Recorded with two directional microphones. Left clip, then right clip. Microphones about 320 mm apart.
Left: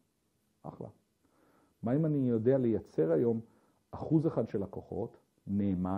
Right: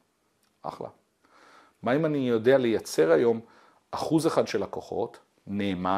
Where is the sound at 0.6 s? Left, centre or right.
Centre.